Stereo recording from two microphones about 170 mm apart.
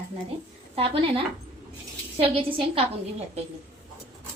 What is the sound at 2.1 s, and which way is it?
Speech, 35° right (ahead or behind).